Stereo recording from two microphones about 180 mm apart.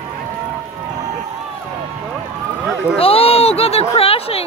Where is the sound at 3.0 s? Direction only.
35° left (ahead or behind).